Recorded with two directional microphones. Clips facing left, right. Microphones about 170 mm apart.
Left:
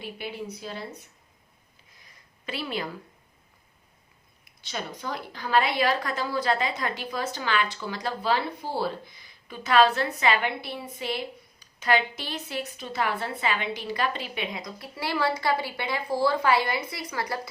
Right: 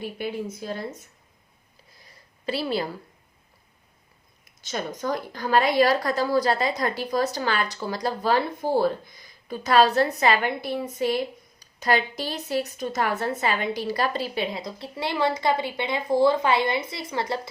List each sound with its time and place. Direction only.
0.0 s speech: 45° right (ahead or behind)
1.9 s a sound: 35° right (ahead or behind)
4.6 s a woman's voice: 45° right (ahead or behind); by 17.5 s 25° right (ahead or behind)